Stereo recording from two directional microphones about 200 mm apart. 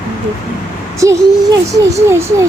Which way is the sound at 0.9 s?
15° right (ahead or behind).